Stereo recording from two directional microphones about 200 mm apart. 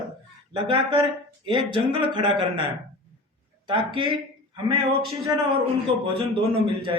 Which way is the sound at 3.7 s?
25° right (ahead or behind).